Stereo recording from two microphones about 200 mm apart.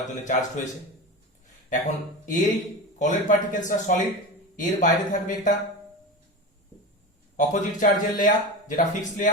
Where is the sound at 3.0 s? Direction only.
40° left (ahead or behind).